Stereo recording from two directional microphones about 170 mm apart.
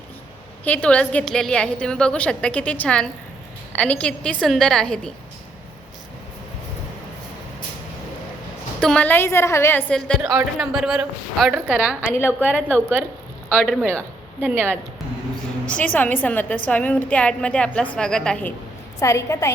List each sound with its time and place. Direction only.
0.6 s a woman's voice: 10° left (ahead or behind)
8.8 s a woman's voice: 5° left (ahead or behind)
9.9 s a man's voice: centre (ahead or behind)
15.6 s a woman's voice: 10° left (ahead or behind)
18.9 s a woman's voice: 15° left (ahead or behind)